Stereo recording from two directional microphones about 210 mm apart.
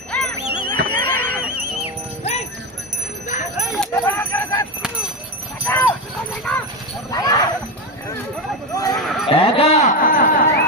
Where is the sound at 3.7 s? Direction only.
5° left (ahead or behind).